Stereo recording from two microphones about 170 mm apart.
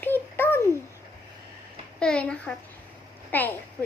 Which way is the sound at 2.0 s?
5° left (ahead or behind).